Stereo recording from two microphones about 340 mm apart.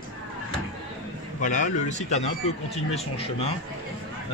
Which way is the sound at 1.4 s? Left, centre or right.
Left.